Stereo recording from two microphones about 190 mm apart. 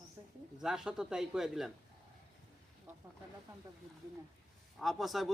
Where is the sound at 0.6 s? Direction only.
5° right (ahead or behind).